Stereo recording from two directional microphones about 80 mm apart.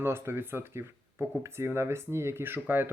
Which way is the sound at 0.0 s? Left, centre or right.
Right.